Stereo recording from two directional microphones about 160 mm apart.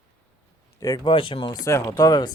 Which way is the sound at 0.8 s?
25° left (ahead or behind).